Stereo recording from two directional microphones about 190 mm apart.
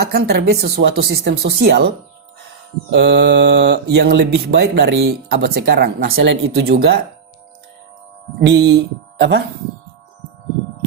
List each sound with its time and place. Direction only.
0.0 s speech: 55° right (ahead or behind)
2.9 s speech: 65° right (ahead or behind)
8.4 s speech: 65° right (ahead or behind)